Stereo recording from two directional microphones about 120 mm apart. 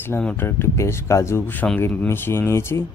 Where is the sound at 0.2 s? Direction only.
15° left (ahead or behind).